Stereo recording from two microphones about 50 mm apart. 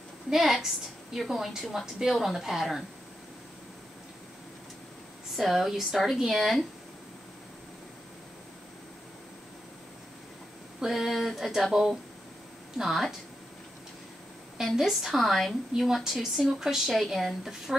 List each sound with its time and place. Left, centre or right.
0.3 s a woman's voice: centre
5.3 s a woman's voice: centre
10.8 s a woman's voice: centre
14.6 s a woman's voice: centre
15.7 s a woman's voice: centre